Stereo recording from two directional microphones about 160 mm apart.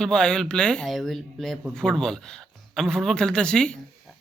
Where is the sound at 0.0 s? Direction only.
5° left (ahead or behind).